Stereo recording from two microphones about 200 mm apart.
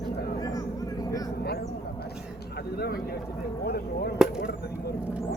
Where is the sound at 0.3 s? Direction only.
20° left (ahead or behind).